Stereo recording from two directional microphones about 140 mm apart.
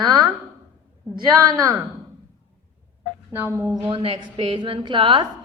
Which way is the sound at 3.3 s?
20° right (ahead or behind).